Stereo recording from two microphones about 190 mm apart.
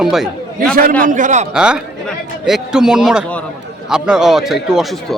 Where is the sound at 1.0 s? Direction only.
40° right (ahead or behind).